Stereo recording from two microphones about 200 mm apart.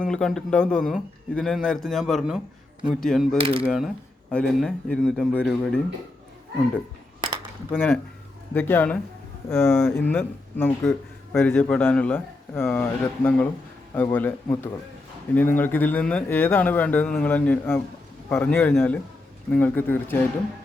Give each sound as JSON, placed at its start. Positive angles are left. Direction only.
{"t": 0.0, "sound": "a man's voice", "side_deg": 5}
{"t": 3.3, "sound": "speech", "side_deg": -25}
{"t": 3.7, "sound": "a man's voice", "side_deg": 0}
{"t": 7.7, "sound": "a man's voice", "side_deg": 5}